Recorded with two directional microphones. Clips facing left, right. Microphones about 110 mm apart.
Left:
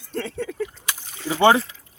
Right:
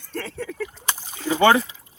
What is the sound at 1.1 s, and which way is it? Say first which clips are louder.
Rowboat: right 3 dB; 20° right (ahead or behind).